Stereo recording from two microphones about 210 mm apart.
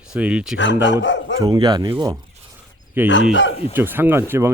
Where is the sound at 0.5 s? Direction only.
60° left (ahead or behind).